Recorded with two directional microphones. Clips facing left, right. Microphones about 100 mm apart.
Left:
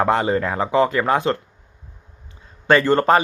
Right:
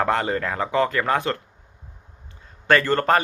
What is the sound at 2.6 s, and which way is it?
Speech, 20° left (ahead or behind).